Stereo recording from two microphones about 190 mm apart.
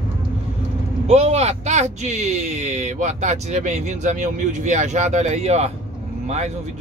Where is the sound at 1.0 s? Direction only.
35° right (ahead or behind).